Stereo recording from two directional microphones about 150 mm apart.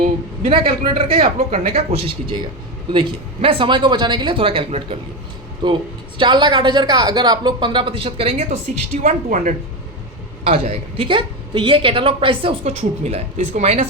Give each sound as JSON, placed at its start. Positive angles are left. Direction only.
{"t": 0.4, "sound": "a woman's voice", "side_deg": -40}
{"t": 8.7, "sound": "a woman's voice", "side_deg": -50}
{"t": 10.4, "sound": "a woman's voice", "side_deg": -45}